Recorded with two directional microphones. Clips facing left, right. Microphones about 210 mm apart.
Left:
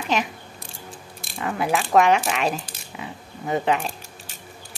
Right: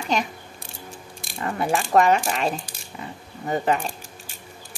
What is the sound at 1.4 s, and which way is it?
Speech, centre (ahead or behind).